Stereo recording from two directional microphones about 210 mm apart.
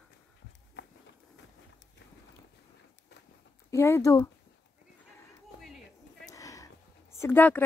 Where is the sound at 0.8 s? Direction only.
55° left (ahead or behind).